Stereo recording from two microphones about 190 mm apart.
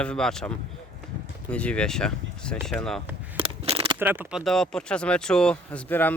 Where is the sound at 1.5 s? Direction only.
5° left (ahead or behind).